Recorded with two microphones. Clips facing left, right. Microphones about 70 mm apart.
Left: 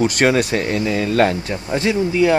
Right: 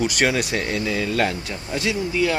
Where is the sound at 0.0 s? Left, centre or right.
Left.